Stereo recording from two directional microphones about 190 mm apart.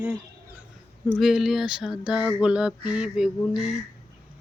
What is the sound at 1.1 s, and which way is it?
Speech, centre (ahead or behind).